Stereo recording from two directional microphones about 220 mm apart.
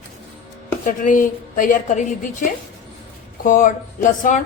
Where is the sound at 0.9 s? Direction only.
35° left (ahead or behind).